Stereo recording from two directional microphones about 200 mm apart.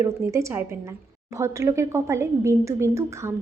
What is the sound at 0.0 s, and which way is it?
A woman's voice, 15° right (ahead or behind).